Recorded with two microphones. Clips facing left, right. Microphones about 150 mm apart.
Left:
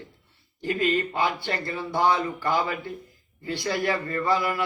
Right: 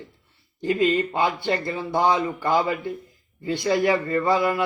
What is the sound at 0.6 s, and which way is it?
A man's voice, 20° right (ahead or behind).